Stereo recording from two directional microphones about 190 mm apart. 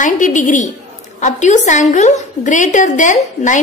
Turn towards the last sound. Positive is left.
turn(degrees=40)  # may be behind; listen again after turning